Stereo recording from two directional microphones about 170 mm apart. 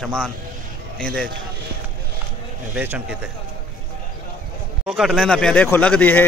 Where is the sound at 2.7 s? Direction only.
5° right (ahead or behind).